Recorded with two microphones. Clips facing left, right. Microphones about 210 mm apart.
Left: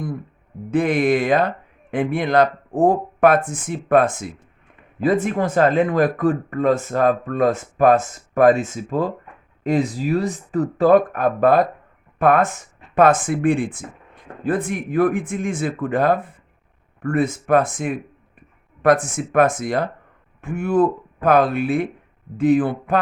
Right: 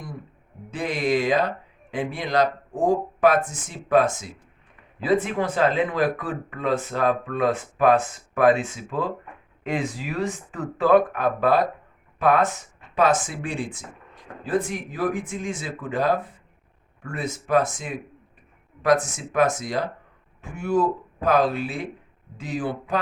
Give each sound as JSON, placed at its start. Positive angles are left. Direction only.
{"t": 0.7, "sound": "speech", "side_deg": 55}